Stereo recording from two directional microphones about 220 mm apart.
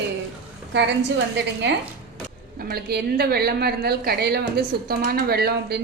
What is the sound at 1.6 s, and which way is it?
A woman's voice, 55° right (ahead or behind).